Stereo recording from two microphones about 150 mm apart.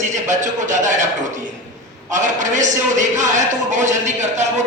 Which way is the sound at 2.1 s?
55° right (ahead or behind).